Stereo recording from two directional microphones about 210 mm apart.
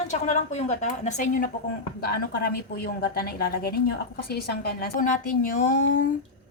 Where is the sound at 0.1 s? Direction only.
35° left (ahead or behind).